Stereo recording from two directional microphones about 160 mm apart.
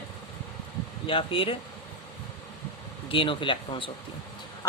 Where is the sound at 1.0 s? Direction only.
35° left (ahead or behind).